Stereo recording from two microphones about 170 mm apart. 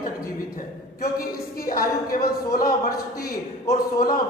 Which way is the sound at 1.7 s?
55° left (ahead or behind).